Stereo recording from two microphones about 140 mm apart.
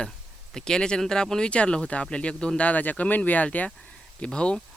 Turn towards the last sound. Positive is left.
turn(degrees=5)  # may be behind; listen again after turning